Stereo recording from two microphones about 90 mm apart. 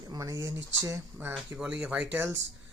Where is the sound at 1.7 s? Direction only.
15° right (ahead or behind).